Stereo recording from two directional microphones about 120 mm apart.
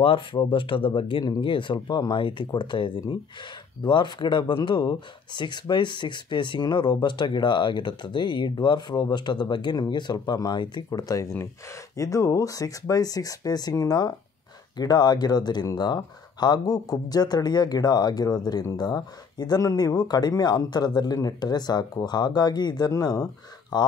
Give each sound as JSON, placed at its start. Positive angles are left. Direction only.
{"t": 0.0, "sound": "speech", "side_deg": 45}